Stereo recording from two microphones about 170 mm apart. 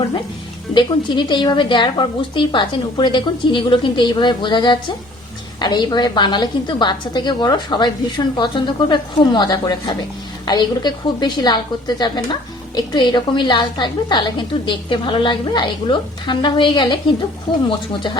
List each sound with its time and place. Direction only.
0.7 s a woman's voice: 30° left (ahead or behind)